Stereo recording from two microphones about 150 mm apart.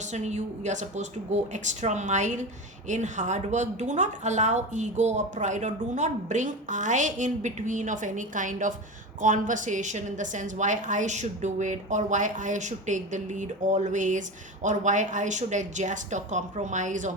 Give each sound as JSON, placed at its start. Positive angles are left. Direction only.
{"t": 0.1, "sound": "a woman's voice", "side_deg": -50}